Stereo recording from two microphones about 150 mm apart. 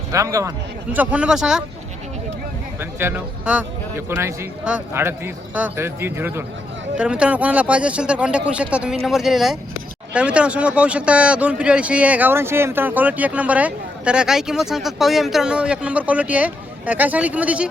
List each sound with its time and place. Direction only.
0.1 s a man's voice: 20° right (ahead or behind)
0.9 s speech: 10° right (ahead or behind)
3.0 s speech: 15° right (ahead or behind)